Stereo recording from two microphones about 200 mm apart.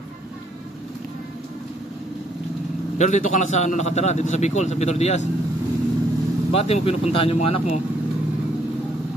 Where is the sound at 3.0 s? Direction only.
35° left (ahead or behind).